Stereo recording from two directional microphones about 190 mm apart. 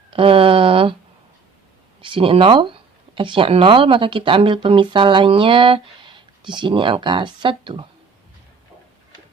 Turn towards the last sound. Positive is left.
turn(degrees=-25)  # may be behind; listen again after turning